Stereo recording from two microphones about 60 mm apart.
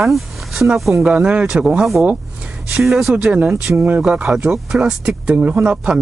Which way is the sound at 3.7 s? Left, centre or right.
Right.